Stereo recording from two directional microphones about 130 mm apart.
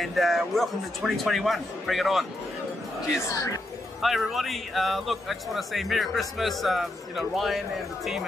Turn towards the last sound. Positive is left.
turn(degrees=0)  # may be behind; listen again after turning